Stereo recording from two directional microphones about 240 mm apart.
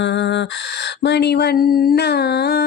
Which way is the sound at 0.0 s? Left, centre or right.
Left.